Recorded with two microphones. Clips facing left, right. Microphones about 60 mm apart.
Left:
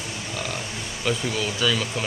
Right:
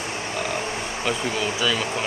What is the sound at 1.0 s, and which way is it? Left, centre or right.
Speech, centre.